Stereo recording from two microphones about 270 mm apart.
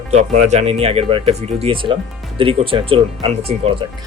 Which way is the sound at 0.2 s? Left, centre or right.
Right.